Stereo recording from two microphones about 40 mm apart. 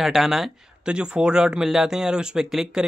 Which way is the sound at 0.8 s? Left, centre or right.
Right.